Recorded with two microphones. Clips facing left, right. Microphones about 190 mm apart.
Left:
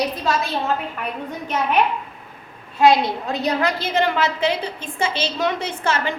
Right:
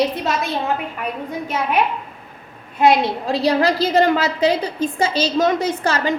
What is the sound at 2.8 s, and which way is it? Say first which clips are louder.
A woman's voice: even; 25° right (ahead or behind).